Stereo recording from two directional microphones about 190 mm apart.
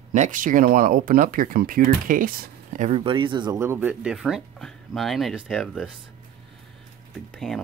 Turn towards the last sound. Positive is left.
turn(degrees=0)  # may be behind; listen again after turning